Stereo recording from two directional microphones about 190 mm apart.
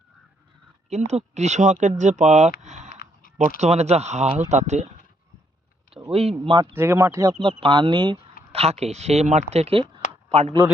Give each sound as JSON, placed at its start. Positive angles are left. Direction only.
{"t": 0.9, "sound": "speech", "side_deg": -35}
{"t": 2.6, "sound": "a sound", "side_deg": -35}
{"t": 3.6, "sound": "speech", "side_deg": -35}
{"t": 5.9, "sound": "speech", "side_deg": -30}
{"t": 6.7, "sound": "speech", "side_deg": -15}